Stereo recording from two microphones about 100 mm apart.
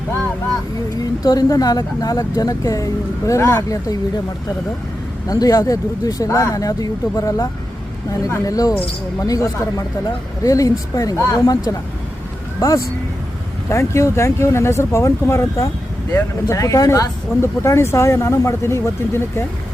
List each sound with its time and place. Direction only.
1.2 s speech: 40° left (ahead or behind)
5.3 s speech: 40° left (ahead or behind)